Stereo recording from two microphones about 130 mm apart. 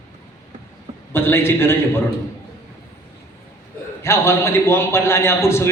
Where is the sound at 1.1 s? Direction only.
15° left (ahead or behind).